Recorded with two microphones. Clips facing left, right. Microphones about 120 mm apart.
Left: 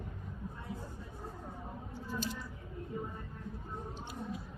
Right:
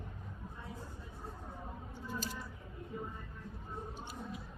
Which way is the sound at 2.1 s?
40° right (ahead or behind).